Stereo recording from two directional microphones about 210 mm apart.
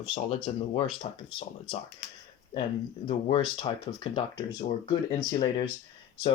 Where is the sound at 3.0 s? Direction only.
25° left (ahead or behind).